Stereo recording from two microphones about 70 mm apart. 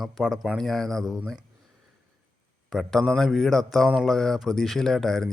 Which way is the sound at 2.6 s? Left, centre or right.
Centre.